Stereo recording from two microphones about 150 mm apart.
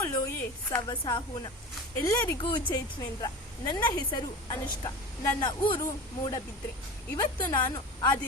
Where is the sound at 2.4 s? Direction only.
30° left (ahead or behind).